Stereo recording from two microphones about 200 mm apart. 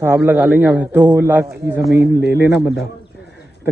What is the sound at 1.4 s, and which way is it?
Speech, 55° right (ahead or behind).